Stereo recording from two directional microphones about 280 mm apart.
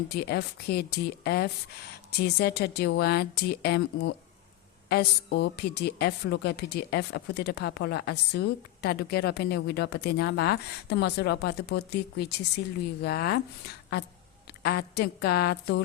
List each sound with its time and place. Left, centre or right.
0.1 s a woman's voice: left
14.6 s a woman's voice: left